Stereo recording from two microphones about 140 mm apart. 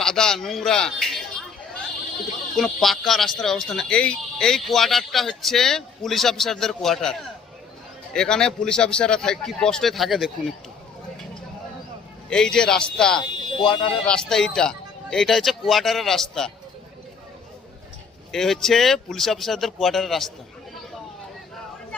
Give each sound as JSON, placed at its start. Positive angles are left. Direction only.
{"t": 0.0, "sound": "a sound", "side_deg": 5}
{"t": 2.6, "sound": "speech", "side_deg": 0}
{"t": 12.3, "sound": "speech", "side_deg": 5}
{"t": 13.7, "sound": "speech", "side_deg": 35}
{"t": 14.1, "sound": "speech", "side_deg": 5}
{"t": 18.3, "sound": "speech", "side_deg": 0}